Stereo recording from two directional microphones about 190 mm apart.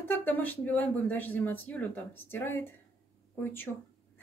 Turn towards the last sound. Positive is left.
turn(degrees=10)  # may be behind; listen again after turning